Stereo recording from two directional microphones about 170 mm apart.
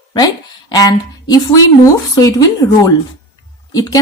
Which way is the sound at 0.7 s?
20° left (ahead or behind).